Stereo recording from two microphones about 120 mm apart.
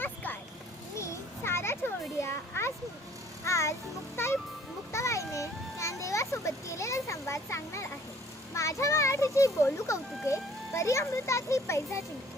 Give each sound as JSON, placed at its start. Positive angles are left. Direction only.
{"t": 0.0, "sound": "vehicle", "side_deg": 15}
{"t": 0.9, "sound": "a sound", "side_deg": 25}
{"t": 3.4, "sound": "music", "side_deg": 25}
{"t": 4.2, "sound": "a child's voice", "side_deg": 20}